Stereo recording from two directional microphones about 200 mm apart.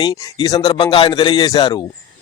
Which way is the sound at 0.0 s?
20° left (ahead or behind).